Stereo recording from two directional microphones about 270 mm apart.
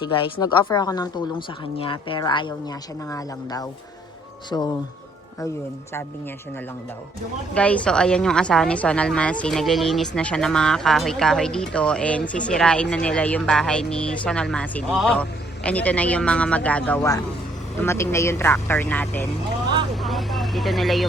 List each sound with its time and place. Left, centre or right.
0.0 s a woman's voice: centre
7.5 s a woman's voice: centre
19.9 s vehicle: centre